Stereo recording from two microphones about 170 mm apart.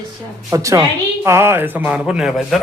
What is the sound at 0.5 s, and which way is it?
A woman's voice, 20° right (ahead or behind).